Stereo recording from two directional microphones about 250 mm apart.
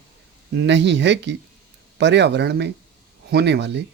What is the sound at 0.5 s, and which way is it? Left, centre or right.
Speech, right.